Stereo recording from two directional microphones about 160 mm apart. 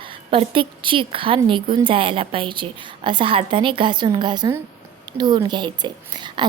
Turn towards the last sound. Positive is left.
turn(degrees=-30)  # may be behind; listen again after turning